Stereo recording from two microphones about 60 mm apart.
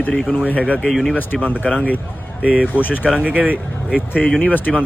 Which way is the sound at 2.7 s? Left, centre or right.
Left.